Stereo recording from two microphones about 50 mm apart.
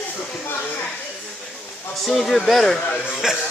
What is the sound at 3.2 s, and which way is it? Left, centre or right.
Music, centre.